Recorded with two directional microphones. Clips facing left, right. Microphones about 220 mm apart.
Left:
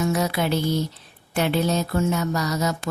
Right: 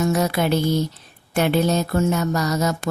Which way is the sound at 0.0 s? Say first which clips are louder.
Right 3 dB; 45° right (ahead or behind).